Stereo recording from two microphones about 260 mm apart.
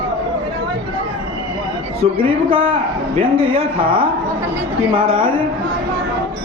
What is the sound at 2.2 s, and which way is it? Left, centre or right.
A man's voice, centre.